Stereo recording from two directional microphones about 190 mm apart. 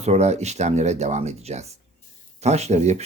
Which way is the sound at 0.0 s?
35° right (ahead or behind).